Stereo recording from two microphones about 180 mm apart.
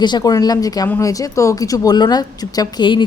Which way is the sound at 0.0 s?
25° left (ahead or behind).